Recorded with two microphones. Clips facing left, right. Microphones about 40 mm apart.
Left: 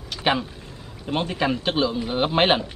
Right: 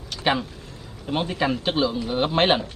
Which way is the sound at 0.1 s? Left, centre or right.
Centre.